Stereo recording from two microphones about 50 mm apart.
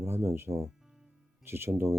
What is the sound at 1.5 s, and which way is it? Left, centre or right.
Speech, right.